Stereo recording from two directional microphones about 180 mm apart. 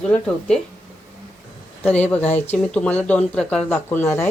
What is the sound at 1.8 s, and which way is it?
Speech, 10° left (ahead or behind).